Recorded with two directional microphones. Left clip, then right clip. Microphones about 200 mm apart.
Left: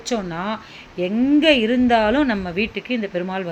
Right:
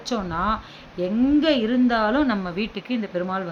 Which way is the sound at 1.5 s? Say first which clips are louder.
Left 4 dB; 35° right (ahead or behind).